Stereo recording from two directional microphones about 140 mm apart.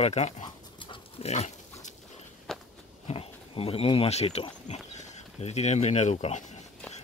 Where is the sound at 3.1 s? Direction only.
45° left (ahead or behind); by 6.4 s 60° left (ahead or behind).